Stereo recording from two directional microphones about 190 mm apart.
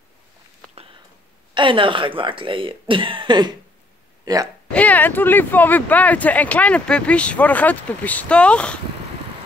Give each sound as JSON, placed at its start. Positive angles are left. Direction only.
{"t": 1.5, "sound": "speech", "side_deg": -25}
{"t": 4.2, "sound": "hiccup", "side_deg": -20}
{"t": 4.7, "sound": "speech", "side_deg": 10}